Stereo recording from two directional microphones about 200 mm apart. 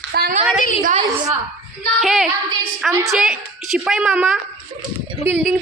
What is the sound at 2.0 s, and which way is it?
Speech, centre (ahead or behind).